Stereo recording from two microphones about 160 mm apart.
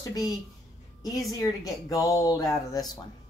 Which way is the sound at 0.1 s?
25° left (ahead or behind).